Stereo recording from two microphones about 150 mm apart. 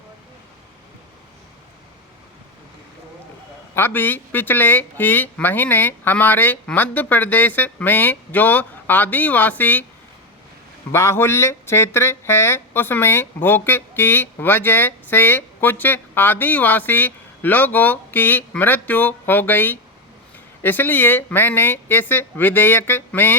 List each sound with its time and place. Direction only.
3.8 s speech: 15° left (ahead or behind)
10.9 s speech: 15° left (ahead or behind)